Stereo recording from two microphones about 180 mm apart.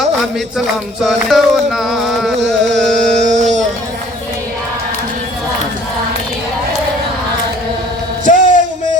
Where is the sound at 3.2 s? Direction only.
40° right (ahead or behind).